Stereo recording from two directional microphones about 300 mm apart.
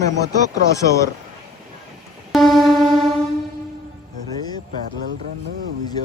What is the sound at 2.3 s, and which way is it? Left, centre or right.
Music, centre.